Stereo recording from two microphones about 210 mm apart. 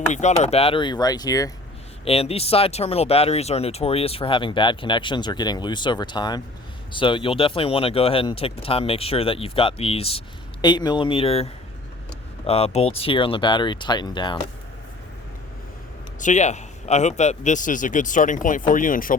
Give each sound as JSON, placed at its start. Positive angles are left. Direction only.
{"t": 0.1, "sound": "speech", "side_deg": 35}
{"t": 2.0, "sound": "speech", "side_deg": 30}
{"t": 16.2, "sound": "a man's voice", "side_deg": 35}